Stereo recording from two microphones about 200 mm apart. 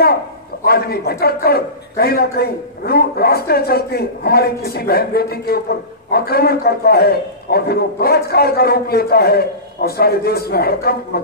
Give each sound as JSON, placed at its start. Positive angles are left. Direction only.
{"t": 0.7, "sound": "a man's voice", "side_deg": 50}